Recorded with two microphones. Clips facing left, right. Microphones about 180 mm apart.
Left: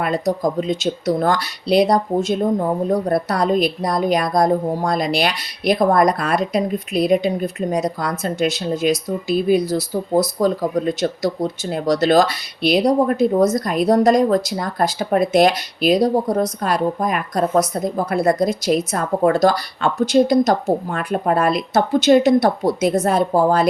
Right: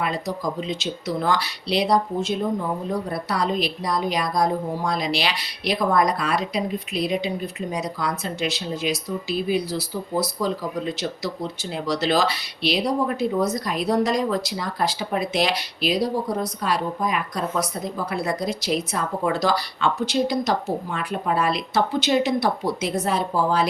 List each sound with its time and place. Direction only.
0.0 s speech: 45° left (ahead or behind)